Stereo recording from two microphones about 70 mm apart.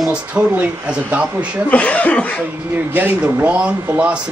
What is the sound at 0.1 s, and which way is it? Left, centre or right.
Speech, centre.